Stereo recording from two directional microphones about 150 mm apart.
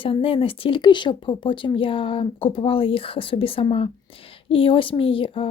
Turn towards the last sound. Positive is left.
turn(degrees=35)  # may be behind; listen again after turning